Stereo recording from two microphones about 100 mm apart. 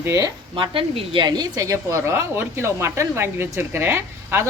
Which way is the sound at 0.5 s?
60° right (ahead or behind).